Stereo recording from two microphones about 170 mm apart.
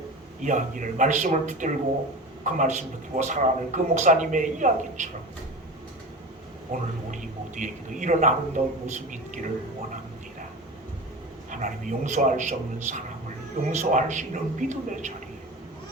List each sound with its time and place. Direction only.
0.4 s speech: 50° right (ahead or behind)
6.7 s a man's voice: 40° right (ahead or behind)
11.5 s speech: 45° right (ahead or behind)